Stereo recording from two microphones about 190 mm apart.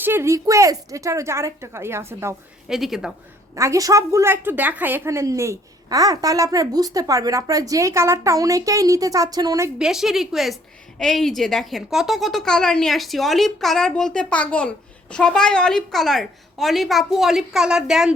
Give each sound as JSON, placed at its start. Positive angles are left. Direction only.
{"t": 0.0, "sound": "a woman's voice", "side_deg": -10}
{"t": 2.6, "sound": "a woman's voice", "side_deg": 0}
{"t": 3.5, "sound": "a woman's voice", "side_deg": -15}
{"t": 9.7, "sound": "a woman's voice", "side_deg": -5}